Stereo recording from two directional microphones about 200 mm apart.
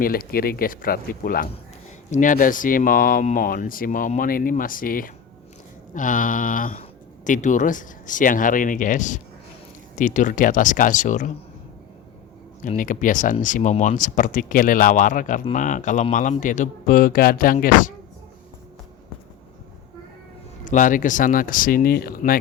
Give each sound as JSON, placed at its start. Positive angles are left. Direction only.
{"t": 0.0, "sound": "speech", "side_deg": 50}
{"t": 12.6, "sound": "speech", "side_deg": 40}
{"t": 20.7, "sound": "speech", "side_deg": 40}